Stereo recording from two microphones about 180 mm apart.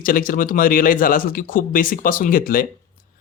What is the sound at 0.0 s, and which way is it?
Speech, 50° left (ahead or behind).